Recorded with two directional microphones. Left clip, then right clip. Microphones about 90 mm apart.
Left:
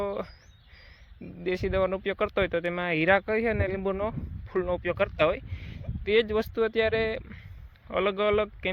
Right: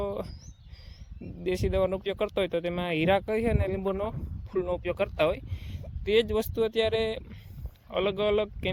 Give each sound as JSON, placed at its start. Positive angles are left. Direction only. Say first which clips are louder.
{"t": 0.0, "sound": "a sound", "louder": "left 1 dB", "side_deg": -45}
{"t": 1.2, "sound": "speech", "louder": "even", "side_deg": -55}
{"t": 4.5, "sound": "speech", "louder": "left 2 dB", "side_deg": -30}